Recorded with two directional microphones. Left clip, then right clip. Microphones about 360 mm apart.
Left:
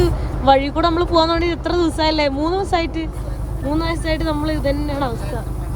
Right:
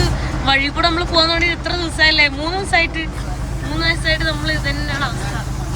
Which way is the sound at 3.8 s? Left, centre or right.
Centre.